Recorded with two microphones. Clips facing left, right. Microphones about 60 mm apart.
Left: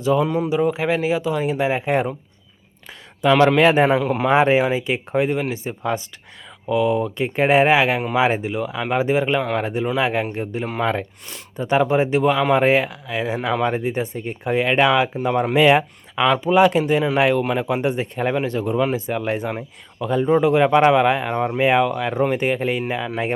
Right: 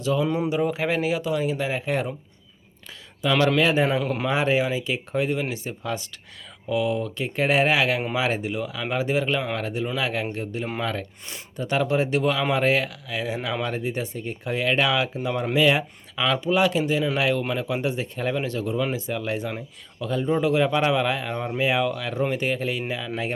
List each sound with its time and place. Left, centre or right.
0.0 s speech: left
0.5 s speech: centre; by 2.1 s left
3.2 s a man's voice: left
4.0 s speech: centre
4.3 s speech: left
16.2 s speech: left
16.7 s a man's voice: left